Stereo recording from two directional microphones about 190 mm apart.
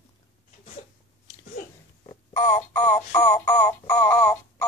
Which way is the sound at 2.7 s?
5° left (ahead or behind).